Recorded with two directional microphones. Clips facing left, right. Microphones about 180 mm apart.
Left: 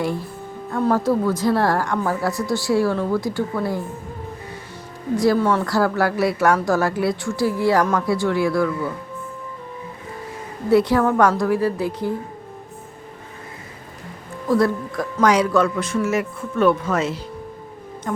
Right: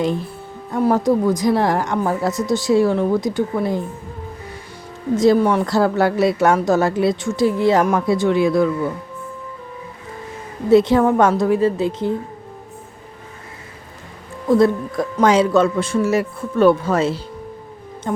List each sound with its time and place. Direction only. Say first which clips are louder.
0.0 s a woman's voice: right 3 dB; 20° right (ahead or behind)
5.1 s a woman's voice: right 3 dB; 20° right (ahead or behind)
10.7 s a woman's voice: right 3 dB; 25° right (ahead or behind)
14.4 s a woman's voice: right 4 dB; 25° right (ahead or behind)